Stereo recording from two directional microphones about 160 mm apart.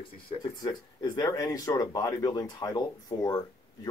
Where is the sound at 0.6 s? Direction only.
25° left (ahead or behind).